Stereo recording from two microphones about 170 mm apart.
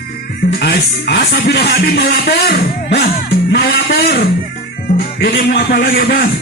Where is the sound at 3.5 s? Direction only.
70° left (ahead or behind).